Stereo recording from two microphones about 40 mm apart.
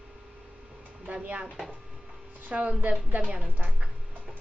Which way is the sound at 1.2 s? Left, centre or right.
Right.